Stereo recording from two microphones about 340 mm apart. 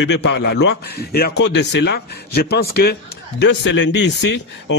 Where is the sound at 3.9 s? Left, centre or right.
Left.